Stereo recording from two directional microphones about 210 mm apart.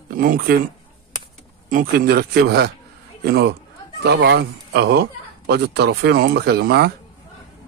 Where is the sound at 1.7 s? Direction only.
45° right (ahead or behind).